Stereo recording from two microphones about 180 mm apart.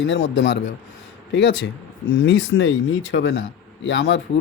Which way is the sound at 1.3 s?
80° left.